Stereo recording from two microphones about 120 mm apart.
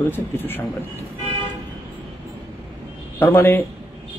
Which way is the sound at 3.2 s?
20° left (ahead or behind).